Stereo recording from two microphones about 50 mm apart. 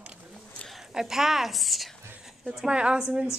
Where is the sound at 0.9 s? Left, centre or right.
Centre.